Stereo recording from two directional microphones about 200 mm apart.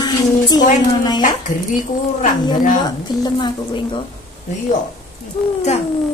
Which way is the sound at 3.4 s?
25° left (ahead or behind).